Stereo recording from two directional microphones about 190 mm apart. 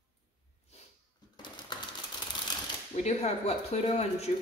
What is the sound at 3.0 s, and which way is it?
Speech, 35° left (ahead or behind).